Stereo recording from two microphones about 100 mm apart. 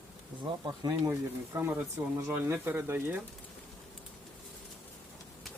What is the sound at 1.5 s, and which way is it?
Speech, 20° right (ahead or behind).